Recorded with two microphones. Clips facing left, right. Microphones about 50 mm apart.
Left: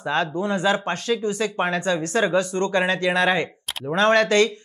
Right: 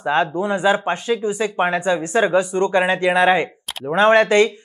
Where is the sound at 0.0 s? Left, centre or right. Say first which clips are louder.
Right 4 dB; centre.